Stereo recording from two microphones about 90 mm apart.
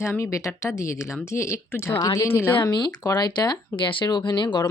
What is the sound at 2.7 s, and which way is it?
Speech, 50° left (ahead or behind).